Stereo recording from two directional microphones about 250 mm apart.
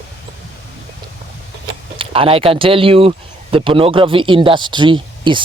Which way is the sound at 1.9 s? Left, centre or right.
Right.